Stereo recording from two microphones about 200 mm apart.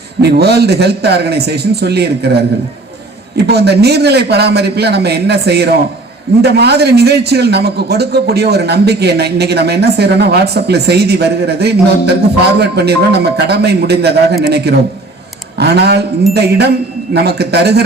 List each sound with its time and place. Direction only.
0.2 s a man's voice: 55° right (ahead or behind)